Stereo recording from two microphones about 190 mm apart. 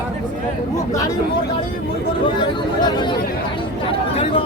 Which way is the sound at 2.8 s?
25° left (ahead or behind).